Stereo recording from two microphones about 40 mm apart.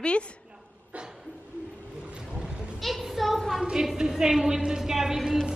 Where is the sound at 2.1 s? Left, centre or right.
Right.